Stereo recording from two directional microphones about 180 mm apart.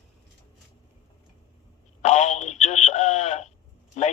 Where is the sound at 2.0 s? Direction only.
40° left (ahead or behind).